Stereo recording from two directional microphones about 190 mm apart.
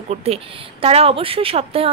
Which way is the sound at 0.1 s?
30° right (ahead or behind).